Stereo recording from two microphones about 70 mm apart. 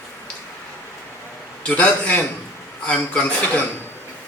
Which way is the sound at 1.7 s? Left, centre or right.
Centre.